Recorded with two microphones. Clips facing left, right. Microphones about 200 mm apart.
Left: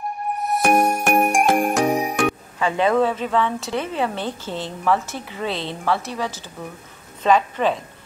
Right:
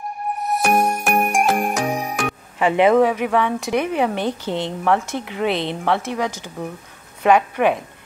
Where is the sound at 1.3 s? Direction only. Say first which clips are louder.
Left 1 dB; centre (ahead or behind).